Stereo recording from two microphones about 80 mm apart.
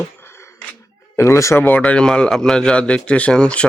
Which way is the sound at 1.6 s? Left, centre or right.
Centre.